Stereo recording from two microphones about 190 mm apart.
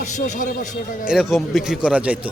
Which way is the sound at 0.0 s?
40° left (ahead or behind).